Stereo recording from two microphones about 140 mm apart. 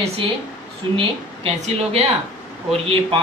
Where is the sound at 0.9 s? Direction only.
45° right (ahead or behind).